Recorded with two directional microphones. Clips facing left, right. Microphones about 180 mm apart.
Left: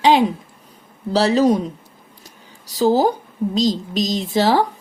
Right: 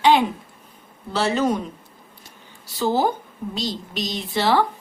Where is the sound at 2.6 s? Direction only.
40° left (ahead or behind).